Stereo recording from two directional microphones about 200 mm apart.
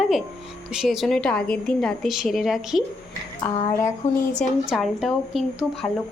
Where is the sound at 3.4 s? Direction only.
10° left (ahead or behind).